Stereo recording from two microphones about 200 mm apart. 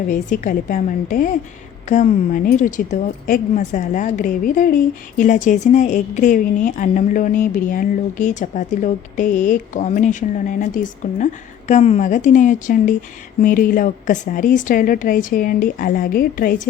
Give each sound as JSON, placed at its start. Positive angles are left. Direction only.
{"t": 0.1, "sound": "speech", "side_deg": 40}